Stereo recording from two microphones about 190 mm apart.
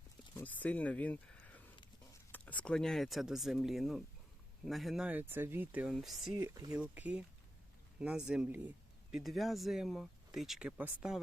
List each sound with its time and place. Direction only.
0.3 s a sound: 10° left (ahead or behind)
2.3 s speech: 10° left (ahead or behind)
6.3 s speech: 20° right (ahead or behind)
6.7 s speech: 5° right (ahead or behind)